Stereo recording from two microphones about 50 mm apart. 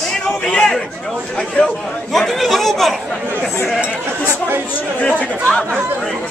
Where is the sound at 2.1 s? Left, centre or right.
Centre.